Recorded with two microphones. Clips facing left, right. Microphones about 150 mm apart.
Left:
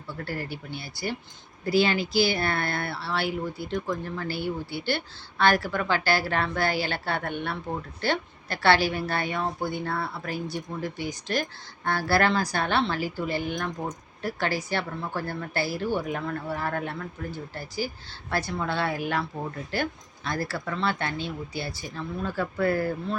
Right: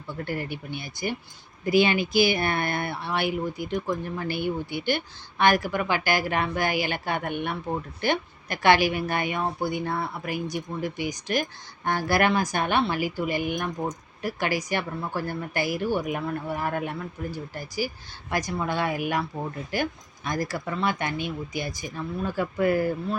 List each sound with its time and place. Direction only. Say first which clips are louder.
0.1 s a woman's voice: right 2 dB; 20° right (ahead or behind)